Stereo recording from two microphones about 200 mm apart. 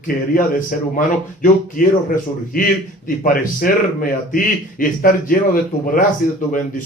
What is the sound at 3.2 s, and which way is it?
Speech, 45° left (ahead or behind).